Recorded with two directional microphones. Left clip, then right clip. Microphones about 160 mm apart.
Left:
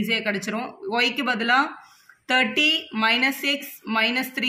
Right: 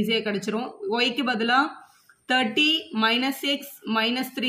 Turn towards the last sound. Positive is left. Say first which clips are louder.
# left 2 dB
turn(degrees=15)  # may be behind; listen again after turning